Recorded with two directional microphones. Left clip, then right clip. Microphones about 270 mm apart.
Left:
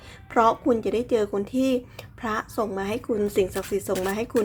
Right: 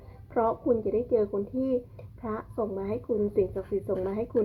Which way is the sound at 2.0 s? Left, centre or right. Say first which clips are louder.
Left 7 dB; left.